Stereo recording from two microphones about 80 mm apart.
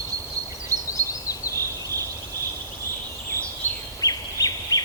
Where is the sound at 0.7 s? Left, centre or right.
Right.